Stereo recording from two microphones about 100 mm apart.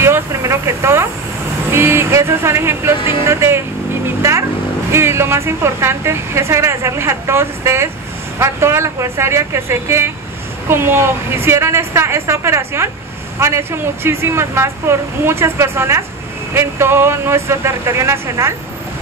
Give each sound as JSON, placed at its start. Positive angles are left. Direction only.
{"t": 0.0, "sound": "a sound", "side_deg": -30}
{"t": 1.7, "sound": "speech", "side_deg": -25}
{"t": 4.2, "sound": "vehicle", "side_deg": -30}
{"t": 4.9, "sound": "speech", "side_deg": -25}